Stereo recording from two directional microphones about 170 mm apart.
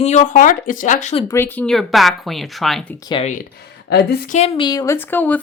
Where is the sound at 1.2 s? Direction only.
15° left (ahead or behind).